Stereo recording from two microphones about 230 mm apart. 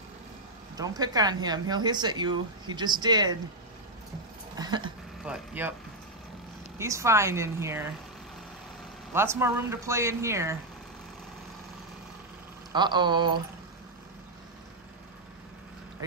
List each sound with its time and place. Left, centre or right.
0.7 s speech: centre
4.6 s a sound: centre
5.2 s speech: centre
6.8 s speech: centre
9.1 s speech: centre
12.7 s speech: centre